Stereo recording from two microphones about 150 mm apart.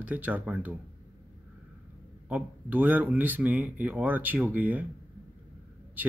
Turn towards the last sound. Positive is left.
turn(degrees=-10)  # may be behind; listen again after turning